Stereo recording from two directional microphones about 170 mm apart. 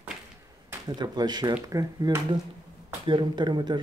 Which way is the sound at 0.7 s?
25° right (ahead or behind).